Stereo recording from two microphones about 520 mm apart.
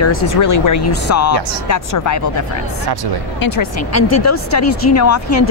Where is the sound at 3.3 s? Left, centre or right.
Left.